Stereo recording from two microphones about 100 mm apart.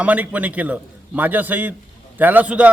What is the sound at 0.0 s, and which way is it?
A man's voice, 15° right (ahead or behind).